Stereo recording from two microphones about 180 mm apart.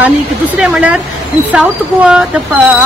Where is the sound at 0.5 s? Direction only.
5° right (ahead or behind).